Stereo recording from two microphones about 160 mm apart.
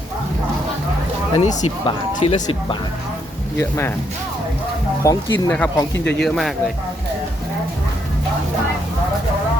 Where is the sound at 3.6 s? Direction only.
15° left (ahead or behind).